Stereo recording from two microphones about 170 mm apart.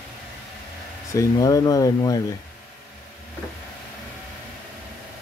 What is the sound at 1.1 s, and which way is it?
Speech, 20° left (ahead or behind).